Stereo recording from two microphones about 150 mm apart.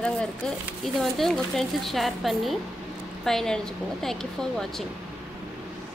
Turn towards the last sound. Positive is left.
turn(degrees=5)  # may be behind; listen again after turning